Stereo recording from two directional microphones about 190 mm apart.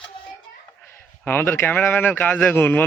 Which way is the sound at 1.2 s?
10° left (ahead or behind).